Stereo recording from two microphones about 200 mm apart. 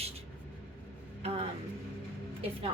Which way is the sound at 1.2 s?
30° right (ahead or behind).